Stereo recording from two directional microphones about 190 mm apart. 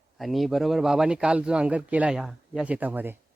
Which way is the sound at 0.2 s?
Centre (ahead or behind).